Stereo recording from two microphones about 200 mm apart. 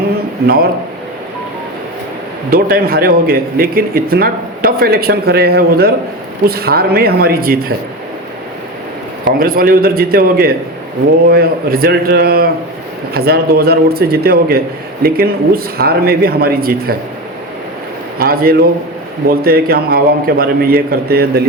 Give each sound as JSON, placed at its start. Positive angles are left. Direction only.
{"t": 2.5, "sound": "speech", "side_deg": -50}
{"t": 9.2, "sound": "speech", "side_deg": -45}
{"t": 18.2, "sound": "speech", "side_deg": -50}